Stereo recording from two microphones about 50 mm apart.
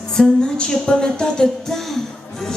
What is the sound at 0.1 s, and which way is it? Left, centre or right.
Music, centre.